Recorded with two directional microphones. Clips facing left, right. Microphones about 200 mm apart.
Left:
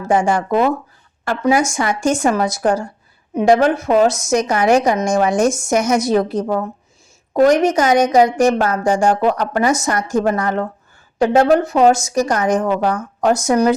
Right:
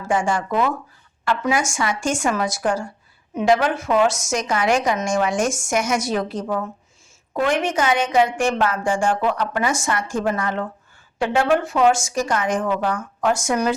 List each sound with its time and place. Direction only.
0.1 s a woman's voice: 40° left (ahead or behind)